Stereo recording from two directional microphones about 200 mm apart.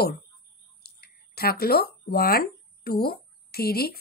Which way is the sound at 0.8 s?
50° left (ahead or behind).